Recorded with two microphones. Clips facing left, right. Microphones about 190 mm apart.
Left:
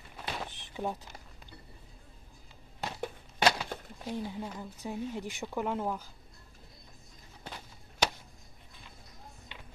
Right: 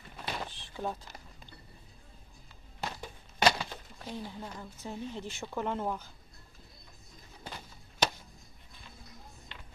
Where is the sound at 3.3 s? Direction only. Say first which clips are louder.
Even; 5° left (ahead or behind).